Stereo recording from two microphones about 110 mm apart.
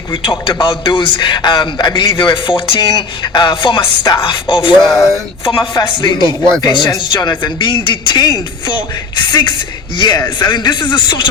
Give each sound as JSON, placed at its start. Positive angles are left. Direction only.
{"t": 0.1, "sound": "a man's voice", "side_deg": 45}
{"t": 4.8, "sound": "a sound", "side_deg": 0}
{"t": 5.7, "sound": "a man's voice", "side_deg": 45}